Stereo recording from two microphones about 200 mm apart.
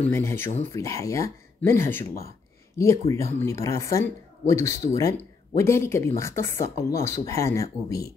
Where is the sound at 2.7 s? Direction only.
15° left (ahead or behind).